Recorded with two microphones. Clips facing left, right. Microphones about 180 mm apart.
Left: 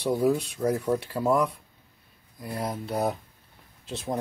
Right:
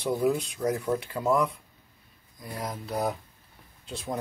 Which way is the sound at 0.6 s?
15° left (ahead or behind).